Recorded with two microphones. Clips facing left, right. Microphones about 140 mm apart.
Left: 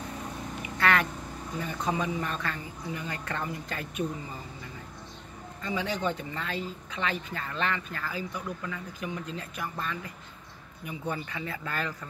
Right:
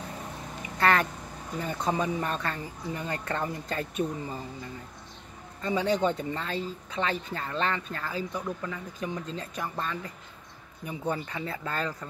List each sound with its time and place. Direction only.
0.7 s speech: 30° right (ahead or behind)
5.6 s speech: 30° right (ahead or behind)